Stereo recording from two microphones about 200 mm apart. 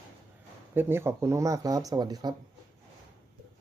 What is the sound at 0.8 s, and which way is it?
Speech, 10° right (ahead or behind).